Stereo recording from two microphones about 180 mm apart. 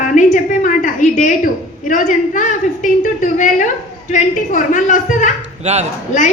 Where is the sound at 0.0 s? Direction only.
45° left (ahead or behind).